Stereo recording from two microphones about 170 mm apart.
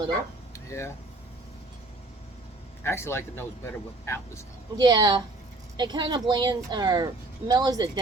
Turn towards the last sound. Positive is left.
turn(degrees=-25)  # may be behind; listen again after turning